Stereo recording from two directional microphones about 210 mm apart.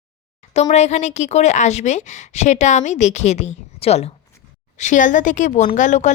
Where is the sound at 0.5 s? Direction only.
30° left (ahead or behind).